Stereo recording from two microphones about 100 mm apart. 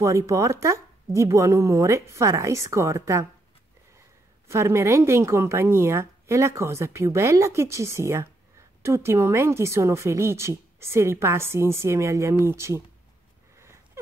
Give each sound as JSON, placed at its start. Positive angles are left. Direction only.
{"t": 0.0, "sound": "a woman's voice", "side_deg": -30}
{"t": 4.5, "sound": "a woman's voice", "side_deg": -30}